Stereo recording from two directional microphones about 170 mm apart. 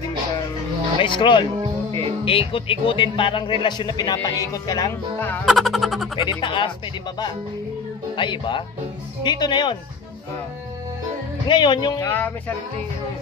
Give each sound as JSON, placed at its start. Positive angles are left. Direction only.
{"t": 1.0, "sound": "speech", "side_deg": 30}
{"t": 1.6, "sound": "music", "side_deg": -30}
{"t": 2.2, "sound": "a man's voice", "side_deg": 30}
{"t": 5.4, "sound": "speech", "side_deg": 0}
{"t": 6.4, "sound": "a man's voice", "side_deg": 30}
{"t": 8.2, "sound": "a man's voice", "side_deg": 30}
{"t": 11.4, "sound": "a man's voice", "side_deg": 25}
{"t": 12.1, "sound": "music", "side_deg": 10}